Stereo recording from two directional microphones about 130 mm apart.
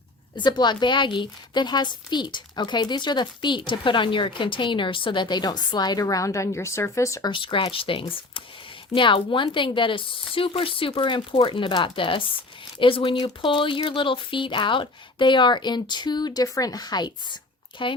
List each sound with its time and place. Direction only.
0.3 s a woman's voice: 35° left (ahead or behind)
7.3 s a woman's voice: 40° left (ahead or behind)